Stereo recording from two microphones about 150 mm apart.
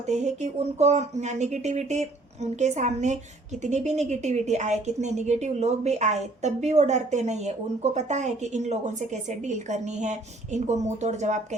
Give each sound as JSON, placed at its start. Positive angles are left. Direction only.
{"t": 0.1, "sound": "a woman's voice", "side_deg": -50}